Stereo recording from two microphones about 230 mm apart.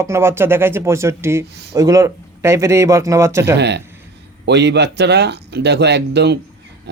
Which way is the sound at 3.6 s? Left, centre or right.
Right.